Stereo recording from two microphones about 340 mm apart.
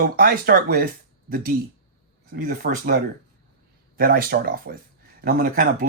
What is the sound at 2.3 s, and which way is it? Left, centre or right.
Speech, right.